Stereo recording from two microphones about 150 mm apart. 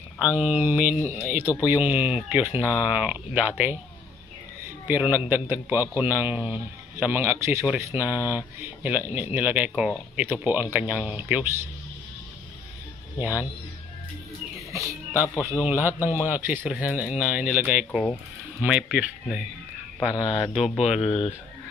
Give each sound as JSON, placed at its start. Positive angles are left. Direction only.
{"t": 0.4, "sound": "a man's voice", "side_deg": -10}
{"t": 4.8, "sound": "a man's voice", "side_deg": -15}
{"t": 8.0, "sound": "speech", "side_deg": 20}
{"t": 8.3, "sound": "a man's voice", "side_deg": -15}
{"t": 13.2, "sound": "a man's voice", "side_deg": -10}
{"t": 14.7, "sound": "music", "side_deg": -20}
{"t": 15.6, "sound": "a man's voice", "side_deg": -15}